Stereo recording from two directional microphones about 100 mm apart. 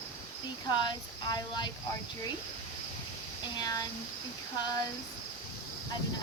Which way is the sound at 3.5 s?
40° left (ahead or behind).